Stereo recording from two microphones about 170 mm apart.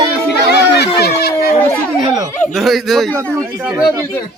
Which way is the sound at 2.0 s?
20° right (ahead or behind).